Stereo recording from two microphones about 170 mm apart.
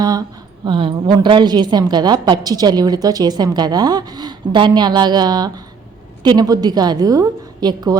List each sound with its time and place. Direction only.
0.0 s a woman's voice: 20° right (ahead or behind)